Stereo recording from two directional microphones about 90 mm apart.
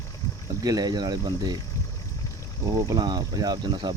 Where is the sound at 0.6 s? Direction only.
50° right (ahead or behind).